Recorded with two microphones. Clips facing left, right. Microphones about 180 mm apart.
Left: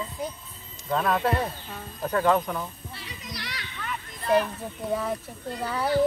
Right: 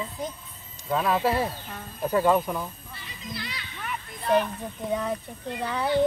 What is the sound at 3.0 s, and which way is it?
Speech, 75° left (ahead or behind).